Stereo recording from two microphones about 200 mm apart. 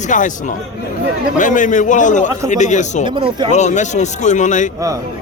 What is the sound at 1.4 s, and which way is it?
Speech, 40° left (ahead or behind).